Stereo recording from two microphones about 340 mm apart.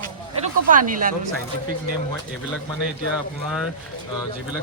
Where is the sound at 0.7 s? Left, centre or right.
Right.